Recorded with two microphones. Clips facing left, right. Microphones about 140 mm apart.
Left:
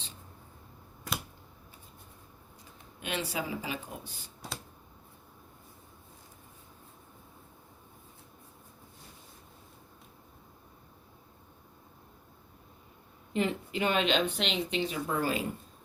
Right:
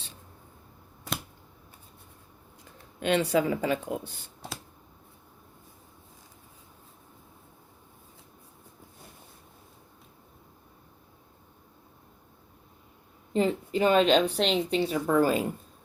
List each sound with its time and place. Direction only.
3.0 s speech: 65° right (ahead or behind)
13.3 s a woman's voice: 35° right (ahead or behind)